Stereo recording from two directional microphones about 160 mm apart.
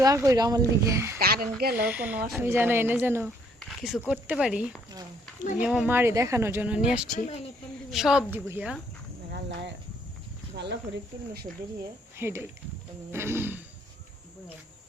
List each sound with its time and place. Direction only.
0.0 s speech: 20° right (ahead or behind)
1.2 s a sound: 70° right (ahead or behind)
1.5 s speech: 75° right (ahead or behind)
1.8 s speech: 10° right (ahead or behind)
3.6 s speech: centre (ahead or behind)
7.1 s speech: 45° left (ahead or behind)
7.9 s a woman's voice: centre (ahead or behind)
9.3 s speech: 90° right
12.1 s speech: 15° right (ahead or behind)